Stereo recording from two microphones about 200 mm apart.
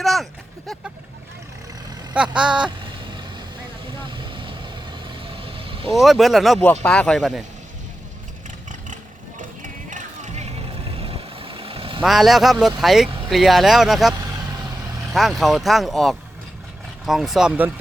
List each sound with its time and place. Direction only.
0.0 s a sound: centre (ahead or behind)
2.1 s speech: 5° right (ahead or behind)
4.2 s vehicle: 25° right (ahead or behind)
5.9 s speech: centre (ahead or behind)
9.4 s music: 40° right (ahead or behind)
11.0 s vehicle: 25° right (ahead or behind)
12.0 s speech: centre (ahead or behind)